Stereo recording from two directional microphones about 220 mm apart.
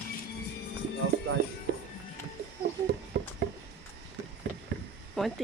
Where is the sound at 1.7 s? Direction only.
45° right (ahead or behind).